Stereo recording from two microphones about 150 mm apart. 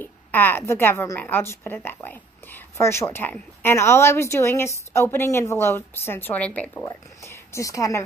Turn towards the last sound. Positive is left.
turn(degrees=20)  # may be behind; listen again after turning